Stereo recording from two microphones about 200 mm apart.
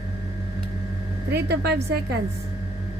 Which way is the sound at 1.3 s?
55° right (ahead or behind).